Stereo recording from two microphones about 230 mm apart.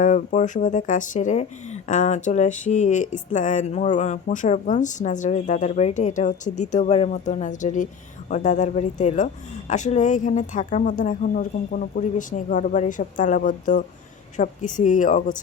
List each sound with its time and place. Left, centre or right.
0.0 s speech: left